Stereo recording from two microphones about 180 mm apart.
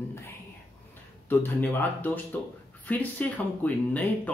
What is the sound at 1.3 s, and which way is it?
Speech, 10° left (ahead or behind).